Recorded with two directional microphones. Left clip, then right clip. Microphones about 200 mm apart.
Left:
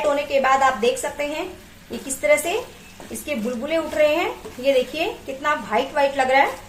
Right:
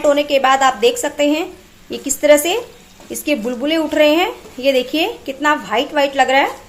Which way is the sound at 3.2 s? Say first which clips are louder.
Right 8 dB; 50° right (ahead or behind).